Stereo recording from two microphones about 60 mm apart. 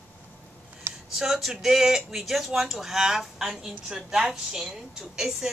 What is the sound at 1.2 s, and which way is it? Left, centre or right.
A woman's voice, centre.